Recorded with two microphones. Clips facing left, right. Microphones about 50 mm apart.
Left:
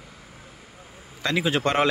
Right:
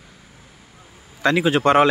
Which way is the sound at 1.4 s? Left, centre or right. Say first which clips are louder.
Right 6 dB; centre.